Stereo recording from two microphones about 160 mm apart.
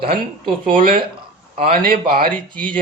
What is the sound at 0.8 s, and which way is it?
Speech, 65° right (ahead or behind).